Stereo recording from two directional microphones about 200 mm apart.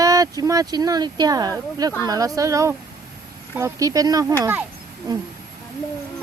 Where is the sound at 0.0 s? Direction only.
15° right (ahead or behind).